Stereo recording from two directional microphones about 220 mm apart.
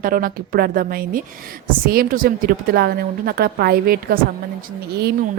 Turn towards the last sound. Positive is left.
turn(degrees=-45)  # may be behind; listen again after turning